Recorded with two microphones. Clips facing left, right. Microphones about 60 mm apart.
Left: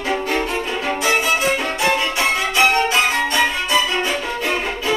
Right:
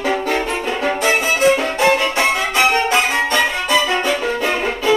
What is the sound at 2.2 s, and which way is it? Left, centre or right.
Music, right.